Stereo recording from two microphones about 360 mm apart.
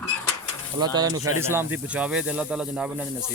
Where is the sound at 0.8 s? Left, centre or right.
Centre.